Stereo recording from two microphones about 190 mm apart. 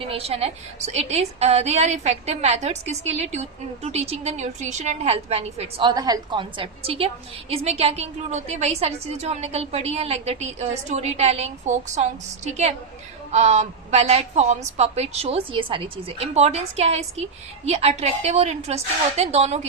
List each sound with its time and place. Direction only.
0.0 s a woman's voice: 30° right (ahead or behind)
13.3 s a woman's voice: 35° right (ahead or behind)